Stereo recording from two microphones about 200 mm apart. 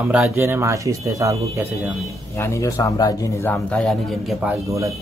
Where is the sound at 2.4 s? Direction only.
15° left (ahead or behind).